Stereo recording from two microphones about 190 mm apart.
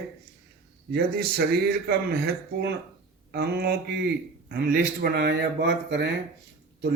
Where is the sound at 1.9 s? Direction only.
60° right (ahead or behind).